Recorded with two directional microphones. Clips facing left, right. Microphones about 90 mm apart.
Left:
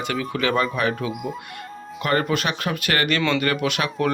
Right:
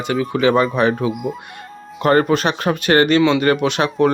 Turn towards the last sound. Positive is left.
turn(degrees=-30)  # may be behind; listen again after turning